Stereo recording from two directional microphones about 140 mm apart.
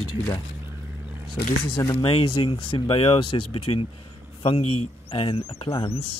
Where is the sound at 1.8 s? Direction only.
35° left (ahead or behind).